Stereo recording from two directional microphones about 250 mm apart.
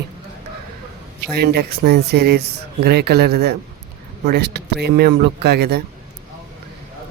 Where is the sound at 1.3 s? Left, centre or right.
Right.